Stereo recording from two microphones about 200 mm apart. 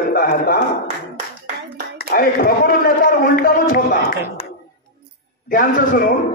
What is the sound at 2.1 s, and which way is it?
Speech, 50° left (ahead or behind).